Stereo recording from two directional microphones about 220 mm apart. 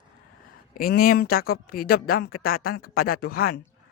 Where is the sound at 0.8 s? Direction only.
40° left (ahead or behind).